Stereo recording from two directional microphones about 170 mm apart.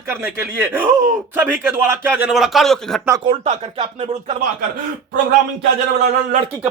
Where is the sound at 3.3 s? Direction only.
35° right (ahead or behind).